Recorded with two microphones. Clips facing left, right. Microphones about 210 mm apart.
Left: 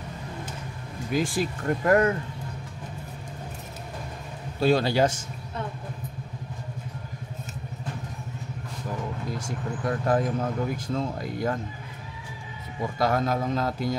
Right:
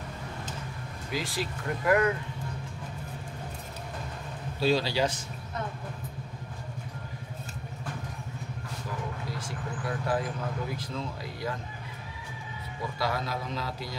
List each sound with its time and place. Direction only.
1.1 s speech: 50° left (ahead or behind)
4.6 s speech: 50° left (ahead or behind)
9.4 s speech: 50° left (ahead or behind)
13.0 s speech: 50° left (ahead or behind)